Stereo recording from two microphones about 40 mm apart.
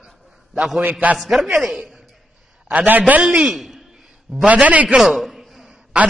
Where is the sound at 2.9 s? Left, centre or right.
Right.